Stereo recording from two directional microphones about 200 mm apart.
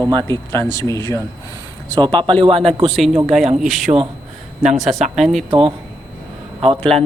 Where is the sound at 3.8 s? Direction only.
30° right (ahead or behind).